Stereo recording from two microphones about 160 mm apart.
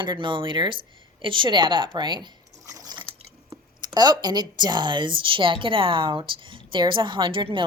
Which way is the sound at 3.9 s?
25° right (ahead or behind).